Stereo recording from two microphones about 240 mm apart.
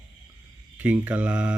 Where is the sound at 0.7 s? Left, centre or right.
Centre.